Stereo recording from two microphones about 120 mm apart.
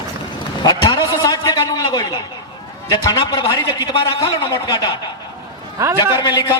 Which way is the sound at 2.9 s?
35° left (ahead or behind).